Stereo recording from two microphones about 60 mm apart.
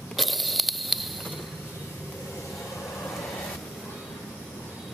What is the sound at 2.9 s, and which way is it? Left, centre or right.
Vehicle, left.